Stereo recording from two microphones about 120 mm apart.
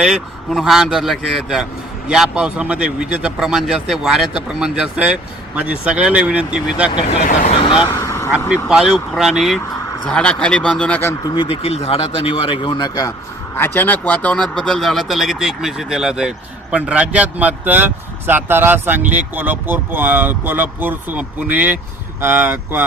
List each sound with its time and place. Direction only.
0.0 s speech: 5° right (ahead or behind)
7.3 s speech: 90° left
7.6 s speech: 45° left (ahead or behind)
8.0 s vehicle: 25° left (ahead or behind)
8.7 s speech: 5° right (ahead or behind)
11.2 s speech: 35° left (ahead or behind)
11.9 s speech: 55° left (ahead or behind); by 13.1 s 35° left (ahead or behind)
13.6 s speech: 15° left (ahead or behind); by 22.8 s 15° right (ahead or behind)